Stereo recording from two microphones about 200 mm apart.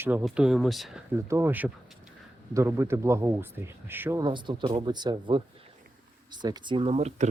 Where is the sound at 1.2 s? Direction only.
15° right (ahead or behind).